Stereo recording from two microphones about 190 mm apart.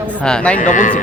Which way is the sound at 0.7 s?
40° left (ahead or behind).